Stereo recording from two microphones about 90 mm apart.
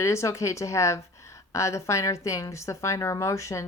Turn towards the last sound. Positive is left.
turn(degrees=35)  # may be behind; listen again after turning